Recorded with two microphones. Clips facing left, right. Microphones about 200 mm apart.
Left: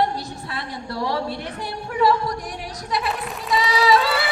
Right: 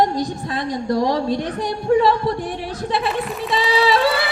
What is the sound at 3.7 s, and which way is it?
Music, 30° right (ahead or behind).